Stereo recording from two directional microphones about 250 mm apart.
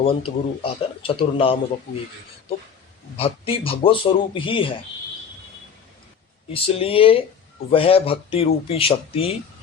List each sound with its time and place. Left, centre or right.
0.0 s speech: left
3.2 s speech: left
6.5 s speech: left